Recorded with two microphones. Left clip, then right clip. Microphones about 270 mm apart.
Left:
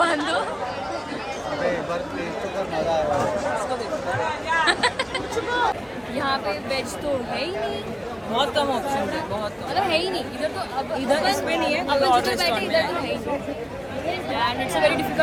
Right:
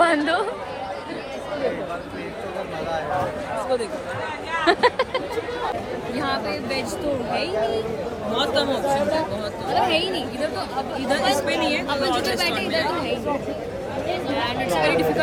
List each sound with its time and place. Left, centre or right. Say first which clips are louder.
0.0 s chatter: right 3 dB; right
4.6 s a sound: right 6 dB; centre
6.1 s speech: left 2 dB; centre
8.4 s a woman's voice: even; centre
9.7 s speech: right 2 dB; centre
11.1 s speech: right 1 dB; centre
12.4 s a woman's voice: left 1 dB; centre
14.3 s a woman's voice: left 1 dB; centre